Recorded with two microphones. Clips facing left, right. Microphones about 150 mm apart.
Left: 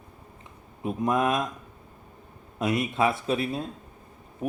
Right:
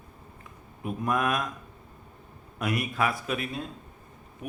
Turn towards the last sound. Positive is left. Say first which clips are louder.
# left 7 dB
turn(degrees=35)  # may be behind; listen again after turning